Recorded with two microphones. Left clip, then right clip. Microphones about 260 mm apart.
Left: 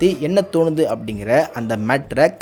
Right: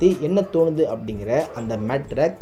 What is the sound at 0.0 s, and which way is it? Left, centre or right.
Speech, left.